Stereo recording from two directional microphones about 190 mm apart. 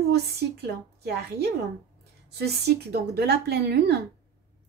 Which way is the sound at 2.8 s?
60° right (ahead or behind).